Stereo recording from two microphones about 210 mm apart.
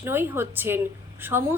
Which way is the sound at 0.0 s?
10° right (ahead or behind).